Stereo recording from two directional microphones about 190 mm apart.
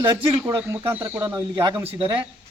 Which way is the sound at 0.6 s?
15° right (ahead or behind).